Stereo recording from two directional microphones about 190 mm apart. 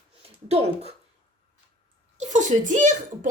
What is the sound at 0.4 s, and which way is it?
Speech, 35° right (ahead or behind).